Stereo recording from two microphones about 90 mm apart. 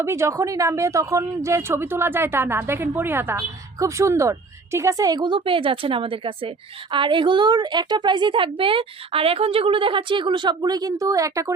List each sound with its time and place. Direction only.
0.0 s a woman's voice: 30° right (ahead or behind); by 6.5 s 85° right
6.9 s a woman's voice: 65° right (ahead or behind); by 11.5 s 35° right (ahead or behind)